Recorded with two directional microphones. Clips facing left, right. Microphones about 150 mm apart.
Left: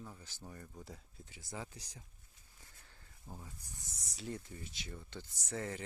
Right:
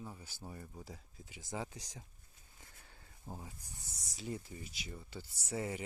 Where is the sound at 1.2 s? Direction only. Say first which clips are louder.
Right 4 dB; 15° right (ahead or behind).